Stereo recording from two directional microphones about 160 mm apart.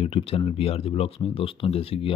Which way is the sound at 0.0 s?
35° left (ahead or behind).